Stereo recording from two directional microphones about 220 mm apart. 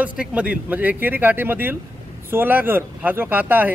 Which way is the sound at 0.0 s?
5° right (ahead or behind).